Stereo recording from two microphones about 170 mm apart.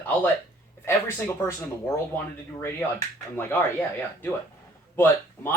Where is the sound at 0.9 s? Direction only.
15° left (ahead or behind).